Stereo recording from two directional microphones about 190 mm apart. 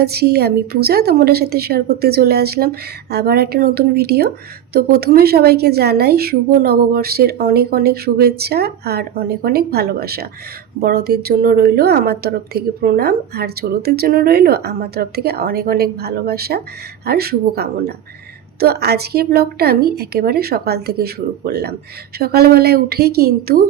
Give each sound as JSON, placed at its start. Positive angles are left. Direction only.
{"t": 0.0, "sound": "a woman's voice", "side_deg": -55}